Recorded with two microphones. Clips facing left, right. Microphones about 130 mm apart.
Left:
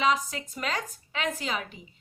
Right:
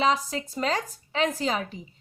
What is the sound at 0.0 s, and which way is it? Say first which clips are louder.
Speech: right 2 dB; 30° right (ahead or behind).